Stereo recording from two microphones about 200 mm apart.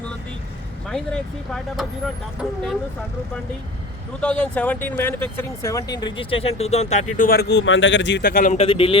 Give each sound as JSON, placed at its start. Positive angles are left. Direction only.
{"t": 0.9, "sound": "speech", "side_deg": 5}
{"t": 4.2, "sound": "speech", "side_deg": 5}
{"t": 8.3, "sound": "speech", "side_deg": 45}
{"t": 8.6, "sound": "a man's voice", "side_deg": 25}